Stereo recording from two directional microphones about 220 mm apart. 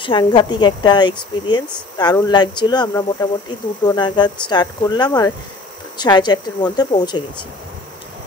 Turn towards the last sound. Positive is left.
turn(degrees=20)  # may be behind; listen again after turning